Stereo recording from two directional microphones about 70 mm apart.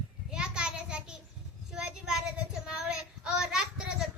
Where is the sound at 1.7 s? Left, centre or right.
Centre.